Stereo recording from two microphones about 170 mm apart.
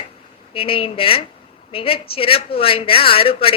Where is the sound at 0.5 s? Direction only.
35° left (ahead or behind).